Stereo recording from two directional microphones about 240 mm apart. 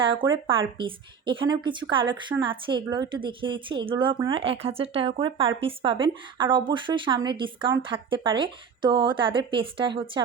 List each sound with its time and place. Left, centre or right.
0.0 s a woman's voice: right